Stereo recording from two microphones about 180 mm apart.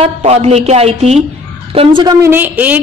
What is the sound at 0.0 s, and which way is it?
A woman's voice, 35° right (ahead or behind).